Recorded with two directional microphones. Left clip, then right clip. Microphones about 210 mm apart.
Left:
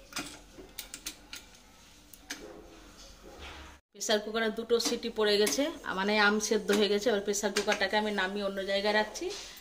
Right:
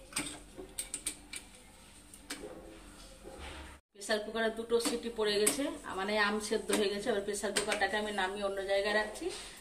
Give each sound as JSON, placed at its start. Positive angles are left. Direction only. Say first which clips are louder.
{"t": 4.1, "sound": "speech", "louder": "left 3 dB", "side_deg": 50}